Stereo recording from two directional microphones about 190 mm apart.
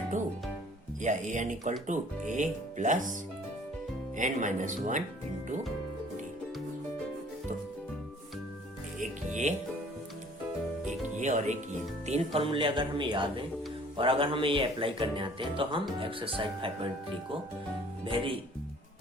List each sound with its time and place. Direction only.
1.0 s speech: 40° right (ahead or behind)
4.2 s speech: 40° right (ahead or behind)
9.0 s music: 40° right (ahead or behind)
10.8 s music: 40° right (ahead or behind)
12.0 s speech: 35° right (ahead or behind)